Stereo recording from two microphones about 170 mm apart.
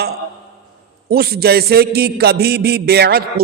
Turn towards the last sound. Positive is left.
turn(degrees=-65)  # may be behind; listen again after turning